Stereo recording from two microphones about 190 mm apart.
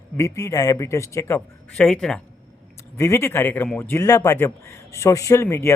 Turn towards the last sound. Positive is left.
turn(degrees=15)  # may be behind; listen again after turning